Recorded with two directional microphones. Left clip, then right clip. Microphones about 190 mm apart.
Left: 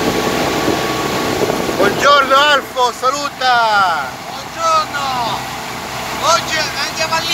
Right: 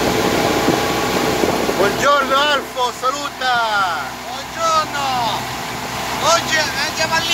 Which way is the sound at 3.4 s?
45° left (ahead or behind).